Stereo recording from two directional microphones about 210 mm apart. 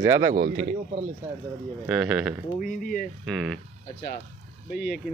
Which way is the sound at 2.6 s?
40° left (ahead or behind).